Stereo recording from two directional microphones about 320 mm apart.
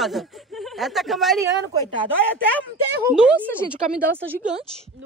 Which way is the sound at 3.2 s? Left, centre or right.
Centre.